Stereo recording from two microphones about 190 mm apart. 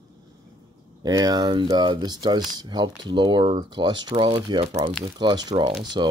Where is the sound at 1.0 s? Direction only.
20° right (ahead or behind).